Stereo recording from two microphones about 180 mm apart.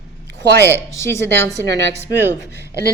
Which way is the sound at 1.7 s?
70° right (ahead or behind).